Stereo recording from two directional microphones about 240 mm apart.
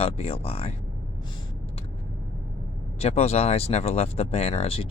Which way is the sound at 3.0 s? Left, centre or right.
Left.